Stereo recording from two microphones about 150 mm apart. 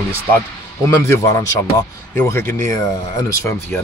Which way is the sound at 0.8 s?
20° left (ahead or behind).